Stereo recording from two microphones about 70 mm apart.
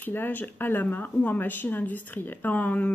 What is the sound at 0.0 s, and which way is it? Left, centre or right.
Speech, left.